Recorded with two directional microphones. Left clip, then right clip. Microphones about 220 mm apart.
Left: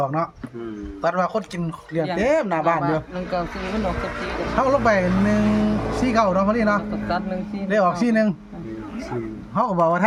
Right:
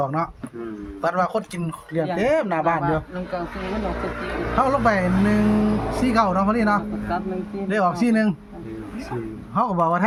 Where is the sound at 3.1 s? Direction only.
45° left (ahead or behind).